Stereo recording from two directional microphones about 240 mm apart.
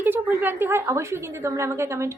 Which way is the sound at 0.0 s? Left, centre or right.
Centre.